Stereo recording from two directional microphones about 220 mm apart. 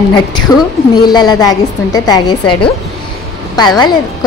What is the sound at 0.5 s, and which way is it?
A woman's voice, 15° left (ahead or behind).